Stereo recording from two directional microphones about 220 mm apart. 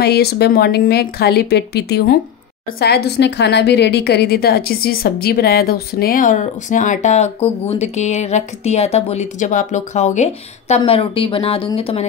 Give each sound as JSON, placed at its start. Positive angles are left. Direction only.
{"t": 0.0, "sound": "a woman's voice", "side_deg": 45}